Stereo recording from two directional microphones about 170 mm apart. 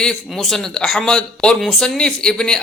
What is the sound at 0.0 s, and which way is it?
Speech, 5° left (ahead or behind).